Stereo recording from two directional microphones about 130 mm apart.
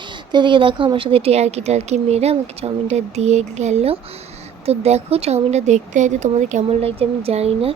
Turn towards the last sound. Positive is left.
turn(degrees=-50)  # may be behind; listen again after turning